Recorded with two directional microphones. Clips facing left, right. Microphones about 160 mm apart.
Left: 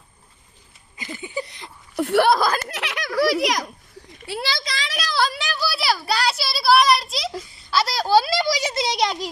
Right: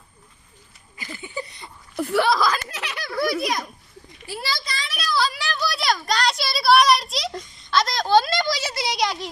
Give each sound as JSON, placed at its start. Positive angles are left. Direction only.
{"t": 0.9, "sound": "a sound", "side_deg": 20}
{"t": 1.5, "sound": "a child's voice", "side_deg": 75}
{"t": 4.3, "sound": "a child's voice", "side_deg": 75}
{"t": 5.5, "sound": "a child's voice", "side_deg": 5}